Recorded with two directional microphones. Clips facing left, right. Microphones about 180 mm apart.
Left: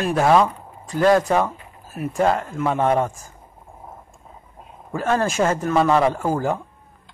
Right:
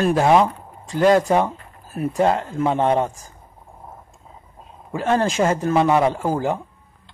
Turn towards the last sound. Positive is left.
turn(degrees=-15)  # may be behind; listen again after turning